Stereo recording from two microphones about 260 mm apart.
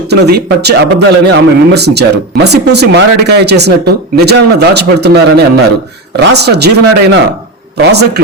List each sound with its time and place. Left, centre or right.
0.1 s speech: right